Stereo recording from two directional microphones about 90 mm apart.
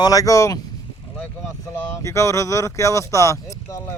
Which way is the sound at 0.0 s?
40° left (ahead or behind).